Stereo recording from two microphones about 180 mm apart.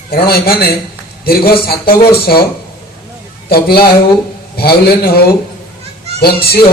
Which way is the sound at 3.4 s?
55° left (ahead or behind).